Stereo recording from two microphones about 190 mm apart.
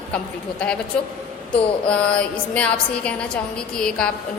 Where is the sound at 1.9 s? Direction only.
5° left (ahead or behind).